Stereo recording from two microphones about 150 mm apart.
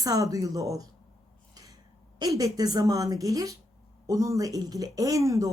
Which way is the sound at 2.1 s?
25° right (ahead or behind).